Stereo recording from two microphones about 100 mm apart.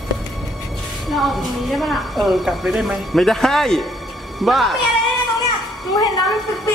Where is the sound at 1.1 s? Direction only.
Centre (ahead or behind).